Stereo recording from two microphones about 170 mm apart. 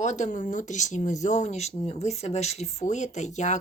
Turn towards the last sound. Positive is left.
turn(degrees=45)  # may be behind; listen again after turning